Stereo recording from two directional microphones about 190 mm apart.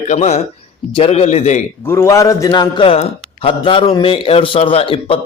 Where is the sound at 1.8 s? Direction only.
15° left (ahead or behind); by 5.1 s 30° left (ahead or behind).